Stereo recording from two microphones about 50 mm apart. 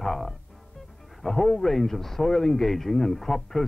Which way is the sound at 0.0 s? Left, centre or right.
Centre.